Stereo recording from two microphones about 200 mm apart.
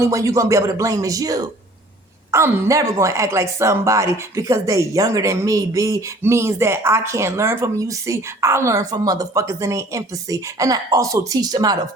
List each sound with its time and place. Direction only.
0.0 s speech: 15° right (ahead or behind)